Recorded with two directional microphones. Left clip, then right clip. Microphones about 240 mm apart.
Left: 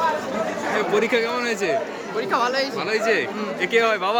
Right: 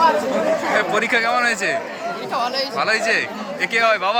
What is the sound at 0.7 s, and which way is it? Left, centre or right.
A man's voice, centre.